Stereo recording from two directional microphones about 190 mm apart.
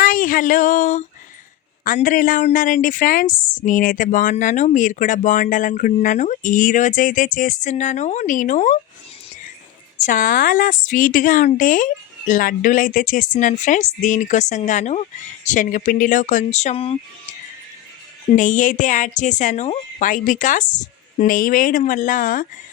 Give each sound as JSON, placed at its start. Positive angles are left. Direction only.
{"t": 0.0, "sound": "a sound", "side_deg": 45}
{"t": 1.8, "sound": "a woman's voice", "side_deg": 45}
{"t": 10.1, "sound": "a woman's voice", "side_deg": 45}
{"t": 18.3, "sound": "a woman's voice", "side_deg": 45}